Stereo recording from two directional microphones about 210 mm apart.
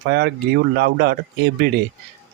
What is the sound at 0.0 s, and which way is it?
Speech, 50° right (ahead or behind).